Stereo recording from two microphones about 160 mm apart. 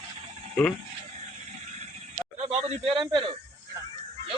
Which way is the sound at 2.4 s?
40° right (ahead or behind).